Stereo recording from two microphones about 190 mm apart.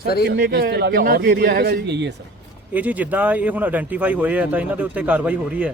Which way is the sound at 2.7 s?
10° right (ahead or behind).